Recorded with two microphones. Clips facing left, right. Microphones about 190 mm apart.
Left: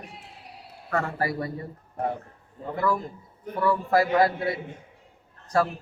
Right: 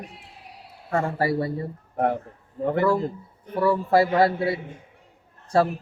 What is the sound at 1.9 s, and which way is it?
Speech, 75° right (ahead or behind).